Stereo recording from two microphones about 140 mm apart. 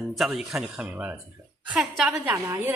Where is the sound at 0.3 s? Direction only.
5° right (ahead or behind).